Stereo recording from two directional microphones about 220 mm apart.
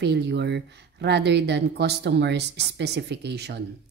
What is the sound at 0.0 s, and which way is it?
Speech, 50° right (ahead or behind).